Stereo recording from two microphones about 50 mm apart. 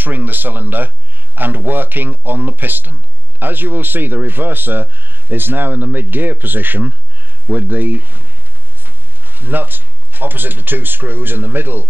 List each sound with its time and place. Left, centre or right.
0.0 s speech: right